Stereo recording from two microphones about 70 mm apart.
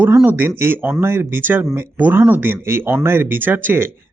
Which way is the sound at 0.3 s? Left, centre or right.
Right.